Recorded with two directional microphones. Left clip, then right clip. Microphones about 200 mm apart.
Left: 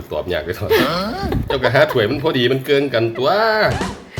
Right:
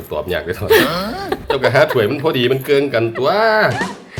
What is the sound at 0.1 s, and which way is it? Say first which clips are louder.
Speech: right 1 dB; centre (ahead or behind).